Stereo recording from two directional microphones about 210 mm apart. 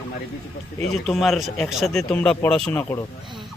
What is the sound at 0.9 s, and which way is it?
A man's voice, centre (ahead or behind).